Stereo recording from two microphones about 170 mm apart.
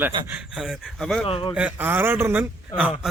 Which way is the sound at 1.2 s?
30° left (ahead or behind).